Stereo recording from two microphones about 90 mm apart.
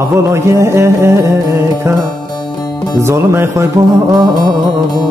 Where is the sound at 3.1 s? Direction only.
30° right (ahead or behind).